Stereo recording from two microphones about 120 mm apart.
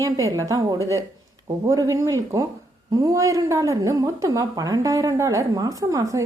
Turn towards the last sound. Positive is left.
turn(degrees=-25)  # may be behind; listen again after turning